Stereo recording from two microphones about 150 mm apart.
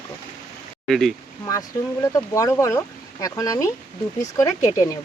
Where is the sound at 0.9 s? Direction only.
Centre (ahead or behind).